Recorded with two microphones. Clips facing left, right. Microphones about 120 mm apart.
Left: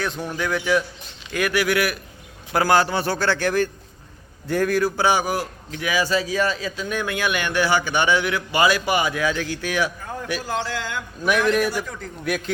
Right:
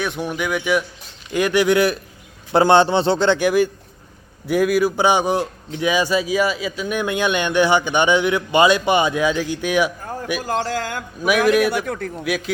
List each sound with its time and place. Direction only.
0.0 s speech: 15° right (ahead or behind)
1.3 s a man's voice: 20° right (ahead or behind)
10.4 s speech: 45° right (ahead or behind)
11.6 s a man's voice: 65° right (ahead or behind)
12.2 s a man's voice: 5° right (ahead or behind)